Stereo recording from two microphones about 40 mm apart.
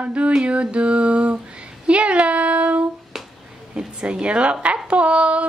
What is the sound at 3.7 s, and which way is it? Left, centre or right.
A woman's voice, right.